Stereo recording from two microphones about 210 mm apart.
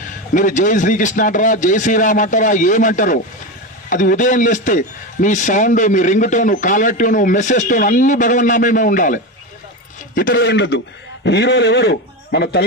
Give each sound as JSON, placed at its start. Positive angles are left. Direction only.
{"t": 0.3, "sound": "a man's voice", "side_deg": 35}